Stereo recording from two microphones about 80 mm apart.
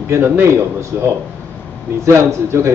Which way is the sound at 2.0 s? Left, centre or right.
Right.